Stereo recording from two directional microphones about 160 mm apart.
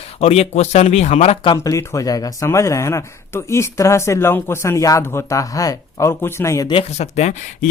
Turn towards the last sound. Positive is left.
turn(degrees=45)  # may be behind; listen again after turning